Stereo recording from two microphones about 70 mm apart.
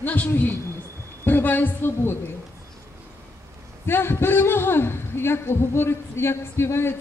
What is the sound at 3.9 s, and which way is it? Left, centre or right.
Speech, left.